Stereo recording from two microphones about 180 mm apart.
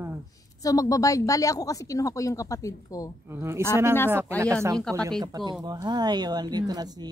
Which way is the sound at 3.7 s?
15° right (ahead or behind).